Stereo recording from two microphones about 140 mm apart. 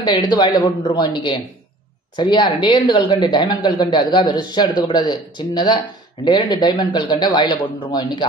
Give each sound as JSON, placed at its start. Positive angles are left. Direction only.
{"t": 0.0, "sound": "a woman's voice", "side_deg": 30}